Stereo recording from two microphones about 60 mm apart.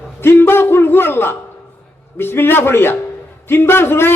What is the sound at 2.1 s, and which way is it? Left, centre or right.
A man's voice, left.